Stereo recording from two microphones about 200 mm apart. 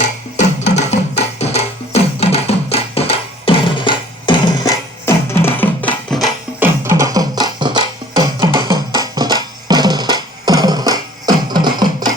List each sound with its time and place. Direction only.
0.3 s music: 35° left (ahead or behind); by 6.2 s 5° left (ahead or behind)
6.6 s music: 15° right (ahead or behind)